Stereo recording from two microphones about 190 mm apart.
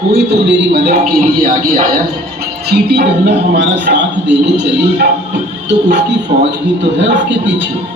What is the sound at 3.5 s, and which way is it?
A man's voice, 70° right (ahead or behind).